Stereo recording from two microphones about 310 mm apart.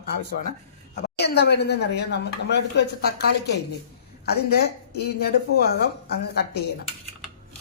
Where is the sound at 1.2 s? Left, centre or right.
Left.